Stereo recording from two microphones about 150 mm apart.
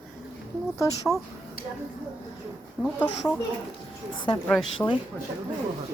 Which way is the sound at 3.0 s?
10° left (ahead or behind).